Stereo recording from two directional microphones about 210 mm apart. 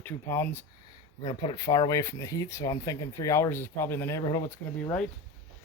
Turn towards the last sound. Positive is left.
turn(degrees=15)  # may be behind; listen again after turning